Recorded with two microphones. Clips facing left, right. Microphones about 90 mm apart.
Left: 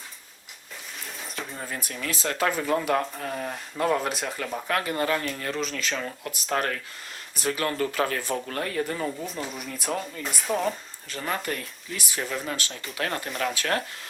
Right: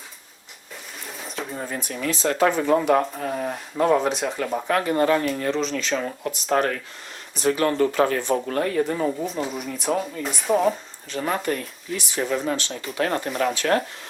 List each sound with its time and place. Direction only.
1.0 s a sound: centre (ahead or behind)
1.6 s speech: centre (ahead or behind)
5.5 s speech: 5° left (ahead or behind)